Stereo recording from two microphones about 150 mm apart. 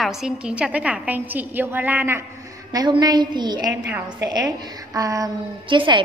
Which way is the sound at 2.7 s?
25° right (ahead or behind).